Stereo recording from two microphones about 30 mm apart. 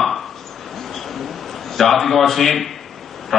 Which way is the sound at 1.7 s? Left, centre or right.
Centre.